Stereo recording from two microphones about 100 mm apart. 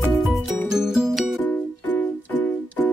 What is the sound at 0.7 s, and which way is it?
Music, 5° right (ahead or behind).